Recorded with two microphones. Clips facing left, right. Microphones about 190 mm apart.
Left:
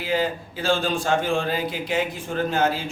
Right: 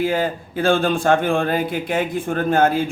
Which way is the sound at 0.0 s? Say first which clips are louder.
Right 4 dB; 50° right (ahead or behind).